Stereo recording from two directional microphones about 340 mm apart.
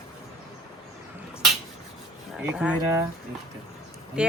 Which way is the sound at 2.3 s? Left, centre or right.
Centre.